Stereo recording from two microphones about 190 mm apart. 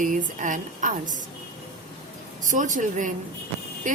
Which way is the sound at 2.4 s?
40° right (ahead or behind).